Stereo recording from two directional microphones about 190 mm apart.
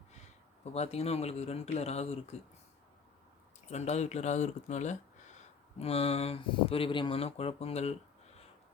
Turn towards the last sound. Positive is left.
turn(degrees=35)  # may be behind; listen again after turning